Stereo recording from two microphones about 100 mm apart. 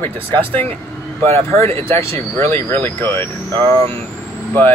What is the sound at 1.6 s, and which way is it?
Speech, 25° left (ahead or behind).